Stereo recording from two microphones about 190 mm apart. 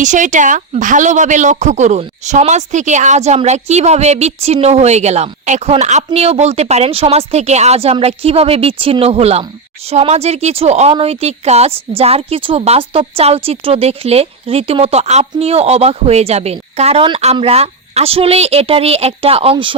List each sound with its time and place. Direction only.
0.0 s speech: 40° right (ahead or behind)